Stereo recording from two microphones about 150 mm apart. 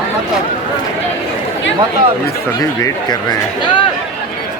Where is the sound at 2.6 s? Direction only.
25° left (ahead or behind).